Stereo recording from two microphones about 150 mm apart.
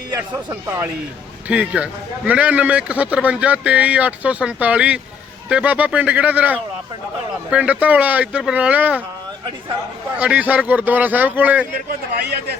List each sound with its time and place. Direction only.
0.3 s speech: 15° right (ahead or behind)
10.2 s speech: 10° right (ahead or behind)
11.9 s a man's voice: 90° right